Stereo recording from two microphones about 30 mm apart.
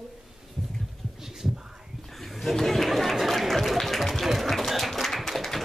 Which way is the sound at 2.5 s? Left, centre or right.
Centre.